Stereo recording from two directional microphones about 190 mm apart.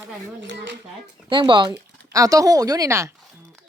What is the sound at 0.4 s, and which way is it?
Speech, 65° right (ahead or behind).